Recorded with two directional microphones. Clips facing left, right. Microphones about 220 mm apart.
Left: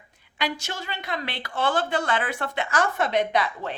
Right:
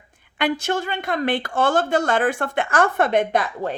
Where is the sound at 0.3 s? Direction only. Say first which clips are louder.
Right 8 dB; 55° right (ahead or behind).